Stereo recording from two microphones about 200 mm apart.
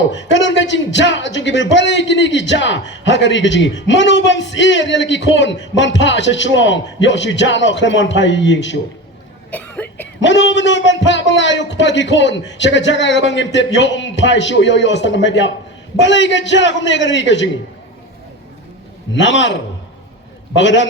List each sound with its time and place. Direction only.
0.1 s speech: 65° left (ahead or behind)
9.5 s cough: 10° left (ahead or behind)
10.2 s speech: 65° left (ahead or behind)
19.2 s speech: 65° left (ahead or behind)
20.6 s speech: 65° left (ahead or behind)